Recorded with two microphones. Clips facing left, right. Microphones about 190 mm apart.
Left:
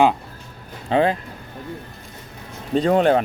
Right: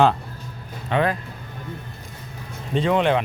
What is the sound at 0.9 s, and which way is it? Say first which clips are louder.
Speech: left 3 dB; 30° left (ahead or behind).